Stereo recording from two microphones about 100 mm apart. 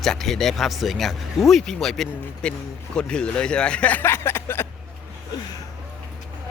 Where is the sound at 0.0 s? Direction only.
5° left (ahead or behind); by 4.7 s 25° left (ahead or behind).